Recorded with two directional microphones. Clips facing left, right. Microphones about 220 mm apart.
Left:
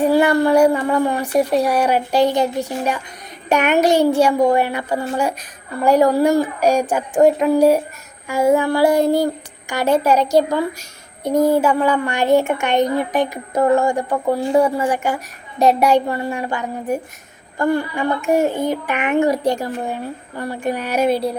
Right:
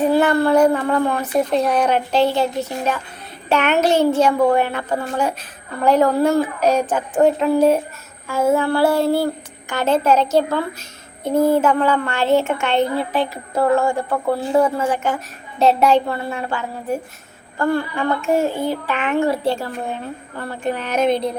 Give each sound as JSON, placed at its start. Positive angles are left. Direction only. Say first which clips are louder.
{"t": 0.0, "sound": "a child's voice", "louder": "left 1 dB", "side_deg": 10}